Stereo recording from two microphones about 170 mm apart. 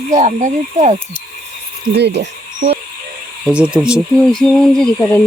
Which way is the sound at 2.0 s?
80° right.